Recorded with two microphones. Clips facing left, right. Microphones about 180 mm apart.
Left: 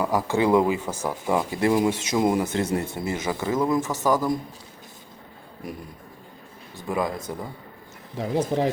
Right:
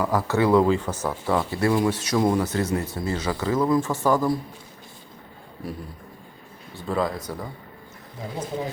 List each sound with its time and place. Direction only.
0.0 s speech: 15° left (ahead or behind)
3.9 s a man's voice: 10° right (ahead or behind)
5.6 s speech: 15° left (ahead or behind)
6.8 s speech: 15° left (ahead or behind)
8.2 s speech: 75° left (ahead or behind)